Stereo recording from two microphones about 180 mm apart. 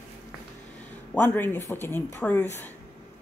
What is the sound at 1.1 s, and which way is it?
Speech, 10° left (ahead or behind).